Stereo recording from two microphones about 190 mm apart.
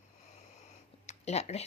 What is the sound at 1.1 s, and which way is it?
Speech, 35° left (ahead or behind).